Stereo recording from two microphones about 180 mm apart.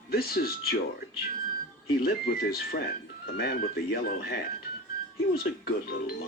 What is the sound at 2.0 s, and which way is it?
Speech, 55° left (ahead or behind).